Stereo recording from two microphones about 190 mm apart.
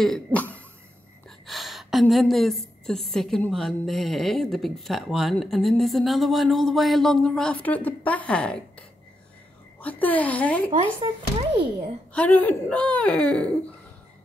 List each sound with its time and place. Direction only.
0.0 s cough: 5° left (ahead or behind)
1.5 s a woman's voice: centre (ahead or behind)
9.8 s speech: 10° left (ahead or behind)
10.7 s speech: 25° right (ahead or behind)
12.1 s speech: 10° left (ahead or behind)